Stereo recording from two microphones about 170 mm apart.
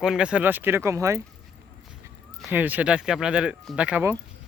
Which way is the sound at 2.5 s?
10° right (ahead or behind).